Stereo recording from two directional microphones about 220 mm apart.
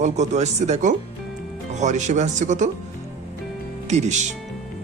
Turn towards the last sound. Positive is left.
turn(degrees=-30)  # may be behind; listen again after turning